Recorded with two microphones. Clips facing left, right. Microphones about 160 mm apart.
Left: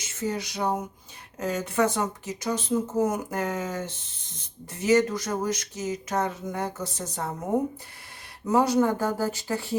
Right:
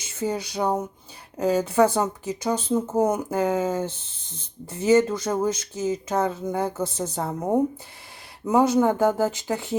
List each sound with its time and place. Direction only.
0.3 s speech: 30° right (ahead or behind)
8.4 s speech: 20° right (ahead or behind)